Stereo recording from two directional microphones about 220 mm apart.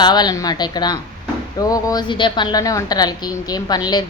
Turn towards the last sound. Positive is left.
turn(degrees=20)  # may be behind; listen again after turning